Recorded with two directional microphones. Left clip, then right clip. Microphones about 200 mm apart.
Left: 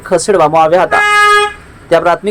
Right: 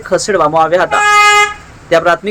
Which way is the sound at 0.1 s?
10° left (ahead or behind).